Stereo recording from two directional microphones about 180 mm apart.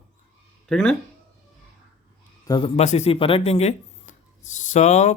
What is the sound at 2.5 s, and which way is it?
Speech, 30° left (ahead or behind).